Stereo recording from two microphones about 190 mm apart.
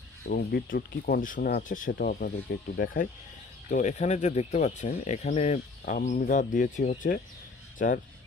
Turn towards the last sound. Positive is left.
turn(degrees=45)  # may be behind; listen again after turning